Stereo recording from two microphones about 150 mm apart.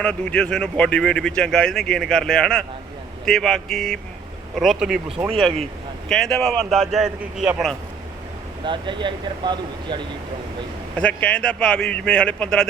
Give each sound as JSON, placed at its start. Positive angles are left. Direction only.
{"t": 0.0, "sound": "speech", "side_deg": 10}
{"t": 8.6, "sound": "speech", "side_deg": -30}
{"t": 10.9, "sound": "a man's voice", "side_deg": 10}